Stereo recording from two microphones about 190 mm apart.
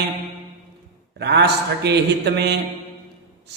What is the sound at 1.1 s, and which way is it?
A man's voice, 65° right (ahead or behind).